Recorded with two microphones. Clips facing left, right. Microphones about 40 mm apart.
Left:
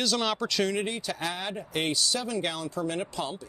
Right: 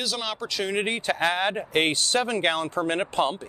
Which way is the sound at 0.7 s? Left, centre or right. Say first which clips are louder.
Right 6 dB; right.